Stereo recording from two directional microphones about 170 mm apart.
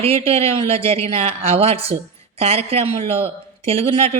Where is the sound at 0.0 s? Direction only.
35° right (ahead or behind).